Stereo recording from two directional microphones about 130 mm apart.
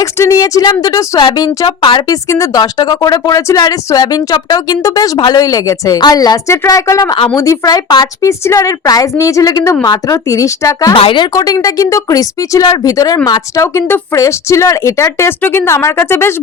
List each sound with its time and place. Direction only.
0.0 s speech: 25° left (ahead or behind); by 2.0 s 40° left (ahead or behind)
2.0 s speech: 25° left (ahead or behind)
10.9 s speech: 40° left (ahead or behind); by 16.3 s 20° left (ahead or behind)